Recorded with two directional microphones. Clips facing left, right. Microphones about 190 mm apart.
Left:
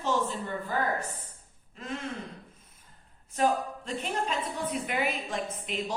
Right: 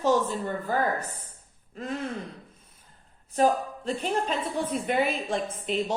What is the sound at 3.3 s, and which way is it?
A woman's voice, 35° right (ahead or behind).